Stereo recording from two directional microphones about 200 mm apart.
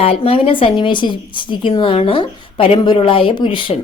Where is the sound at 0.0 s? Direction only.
30° left (ahead or behind).